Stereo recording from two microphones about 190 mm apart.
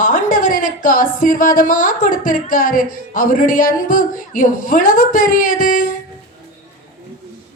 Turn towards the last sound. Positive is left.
turn(degrees=45)  # may be behind; listen again after turning